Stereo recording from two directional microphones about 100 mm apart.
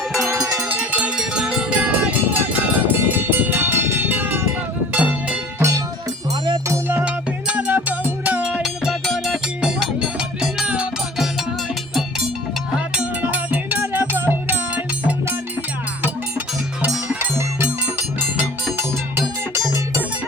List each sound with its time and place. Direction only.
0.7 s cowbell: 15° right (ahead or behind)
4.9 s music: 15° right (ahead or behind)
6.7 s music: 20° right (ahead or behind)
12.7 s music: 5° right (ahead or behind)
13.2 s music: 15° right (ahead or behind)
17.2 s music: 25° right (ahead or behind)